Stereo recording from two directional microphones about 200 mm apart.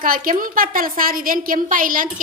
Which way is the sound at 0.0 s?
45° right (ahead or behind).